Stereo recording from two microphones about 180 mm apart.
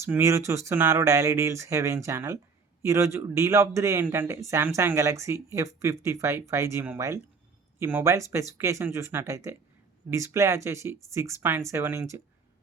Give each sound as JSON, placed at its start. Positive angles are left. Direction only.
{"t": 0.0, "sound": "speech", "side_deg": -15}